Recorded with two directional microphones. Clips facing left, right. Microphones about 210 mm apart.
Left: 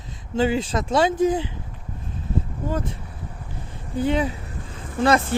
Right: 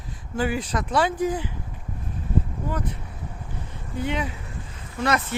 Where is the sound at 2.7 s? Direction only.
25° left (ahead or behind).